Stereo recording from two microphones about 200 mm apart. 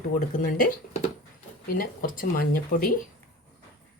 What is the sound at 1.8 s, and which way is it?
Speech, 45° left (ahead or behind).